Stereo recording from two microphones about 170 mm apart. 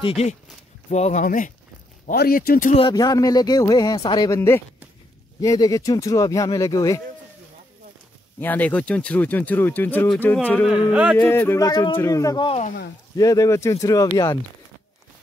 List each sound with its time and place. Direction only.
0.0 s speech: 35° left (ahead or behind); by 2.7 s 60° left (ahead or behind)
2.9 s speech: 20° left (ahead or behind)
4.4 s speech: 15° left (ahead or behind)
8.4 s speech: 10° left (ahead or behind)
10.5 s a sound: centre (ahead or behind)
11.1 s speech: 10° left (ahead or behind)